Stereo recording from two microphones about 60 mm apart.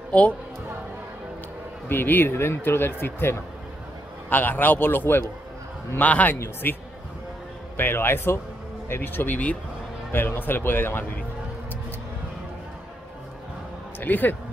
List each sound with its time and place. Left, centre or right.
1.9 s a man's voice: left
6.4 s speech: left
10.1 s speech: left
13.9 s speech: left